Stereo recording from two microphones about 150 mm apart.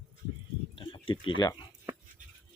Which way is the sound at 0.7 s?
35° left (ahead or behind).